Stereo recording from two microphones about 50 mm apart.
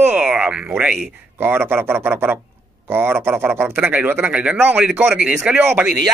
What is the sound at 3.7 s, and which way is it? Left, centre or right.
Speech, right.